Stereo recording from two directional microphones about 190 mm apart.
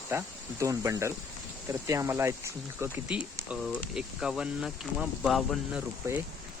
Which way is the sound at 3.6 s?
Centre (ahead or behind).